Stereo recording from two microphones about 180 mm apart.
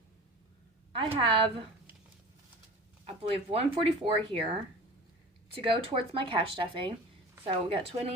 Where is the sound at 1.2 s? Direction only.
30° right (ahead or behind).